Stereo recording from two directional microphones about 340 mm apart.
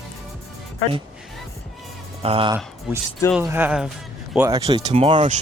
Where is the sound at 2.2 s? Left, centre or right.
Centre.